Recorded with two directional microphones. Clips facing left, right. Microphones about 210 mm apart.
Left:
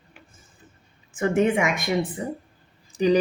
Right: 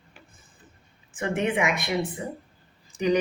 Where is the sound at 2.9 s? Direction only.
35° left (ahead or behind).